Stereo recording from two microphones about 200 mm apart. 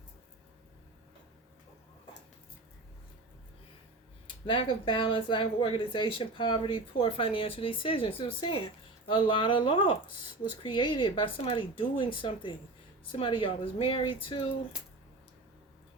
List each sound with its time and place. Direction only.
4.4 s speech: 25° left (ahead or behind)
9.0 s speech: 25° left (ahead or behind)